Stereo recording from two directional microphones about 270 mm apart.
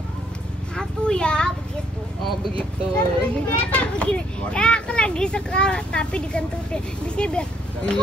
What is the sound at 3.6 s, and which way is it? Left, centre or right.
A child's voice, centre.